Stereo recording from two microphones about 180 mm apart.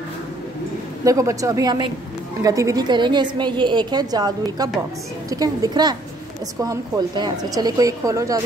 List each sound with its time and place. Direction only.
1.0 s a woman's voice: 20° right (ahead or behind)